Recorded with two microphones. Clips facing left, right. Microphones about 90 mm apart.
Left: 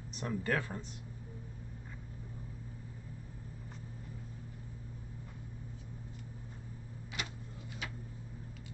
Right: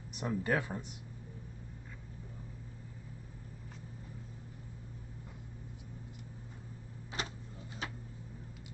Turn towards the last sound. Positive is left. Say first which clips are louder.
# right 2 dB
turn(degrees=-35)  # may be behind; listen again after turning